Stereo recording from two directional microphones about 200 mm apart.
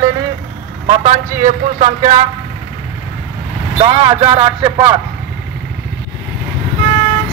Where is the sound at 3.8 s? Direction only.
25° right (ahead or behind).